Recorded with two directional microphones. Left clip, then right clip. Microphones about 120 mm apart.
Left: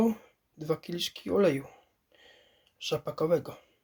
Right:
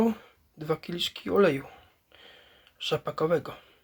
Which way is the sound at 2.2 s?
15° left (ahead or behind).